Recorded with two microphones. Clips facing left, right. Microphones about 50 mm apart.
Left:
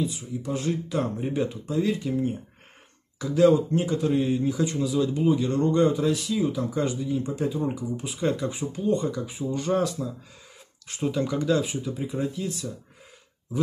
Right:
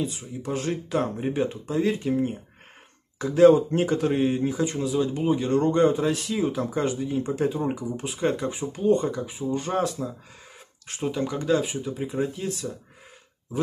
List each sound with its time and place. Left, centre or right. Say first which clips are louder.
0.0 s speech: left 1 dB; right
1.0 s speech: right 1 dB; right
3.2 s speech: right 3 dB; right
4.1 s speech: even; right
11.0 s speech: left 1 dB; centre
12.3 s speech: even; right